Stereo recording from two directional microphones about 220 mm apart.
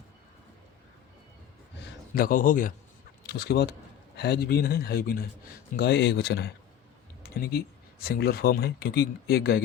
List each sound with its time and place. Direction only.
1.8 s a man's voice: 40° left (ahead or behind)